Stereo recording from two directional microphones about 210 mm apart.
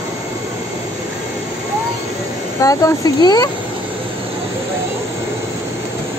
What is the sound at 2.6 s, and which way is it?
Speech, 15° left (ahead or behind).